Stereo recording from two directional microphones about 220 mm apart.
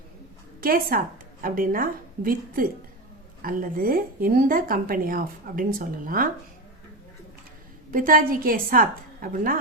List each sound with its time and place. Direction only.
0.6 s a woman's voice: 40° right (ahead or behind)
7.9 s a woman's voice: 40° right (ahead or behind)